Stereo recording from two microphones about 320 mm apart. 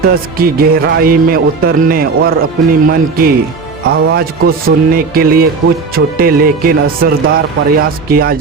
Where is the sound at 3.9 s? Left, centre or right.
Right.